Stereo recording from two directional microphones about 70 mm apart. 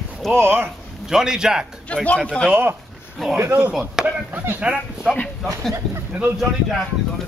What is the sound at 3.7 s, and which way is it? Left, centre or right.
Speech, centre.